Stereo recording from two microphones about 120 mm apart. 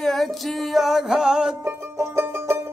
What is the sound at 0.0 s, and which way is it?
Music, centre (ahead or behind).